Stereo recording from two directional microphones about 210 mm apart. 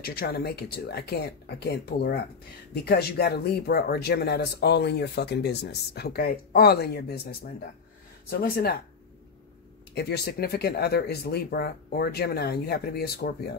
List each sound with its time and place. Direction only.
0.0 s speech: 45° left (ahead or behind)
9.9 s speech: 50° left (ahead or behind)